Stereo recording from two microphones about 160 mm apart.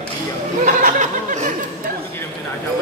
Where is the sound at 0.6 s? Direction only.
50° right (ahead or behind).